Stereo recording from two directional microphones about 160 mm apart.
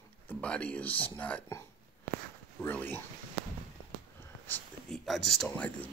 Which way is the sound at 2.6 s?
10° left (ahead or behind).